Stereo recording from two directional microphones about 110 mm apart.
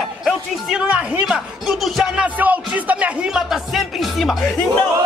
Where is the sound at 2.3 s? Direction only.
15° right (ahead or behind).